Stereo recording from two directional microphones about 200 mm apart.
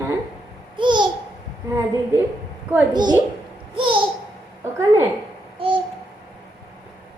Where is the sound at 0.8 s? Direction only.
25° right (ahead or behind).